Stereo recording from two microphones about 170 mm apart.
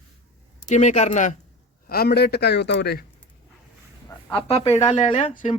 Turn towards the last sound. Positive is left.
turn(degrees=45)  # may be behind; listen again after turning